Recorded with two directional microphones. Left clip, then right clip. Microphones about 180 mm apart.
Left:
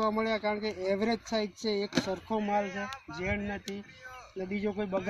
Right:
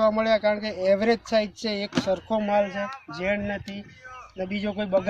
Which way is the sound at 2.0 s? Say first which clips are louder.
Right 5 dB; 50° left (ahead or behind).